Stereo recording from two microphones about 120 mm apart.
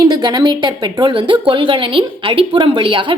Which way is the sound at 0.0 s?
35° right (ahead or behind).